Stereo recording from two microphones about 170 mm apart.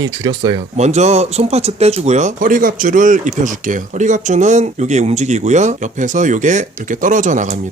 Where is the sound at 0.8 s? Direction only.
40° right (ahead or behind).